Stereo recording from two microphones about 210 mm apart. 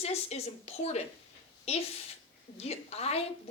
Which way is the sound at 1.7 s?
30° left (ahead or behind).